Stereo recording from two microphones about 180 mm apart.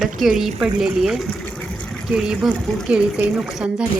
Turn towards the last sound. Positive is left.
turn(degrees=-5)  # may be behind; listen again after turning